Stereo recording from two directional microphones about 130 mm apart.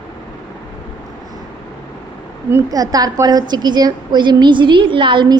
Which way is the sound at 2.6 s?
30° right (ahead or behind).